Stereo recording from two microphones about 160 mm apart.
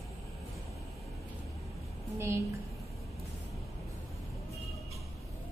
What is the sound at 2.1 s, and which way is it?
Speech, 15° right (ahead or behind).